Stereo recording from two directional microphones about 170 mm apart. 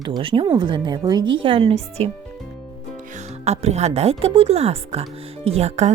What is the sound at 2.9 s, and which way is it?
Music, 45° right (ahead or behind).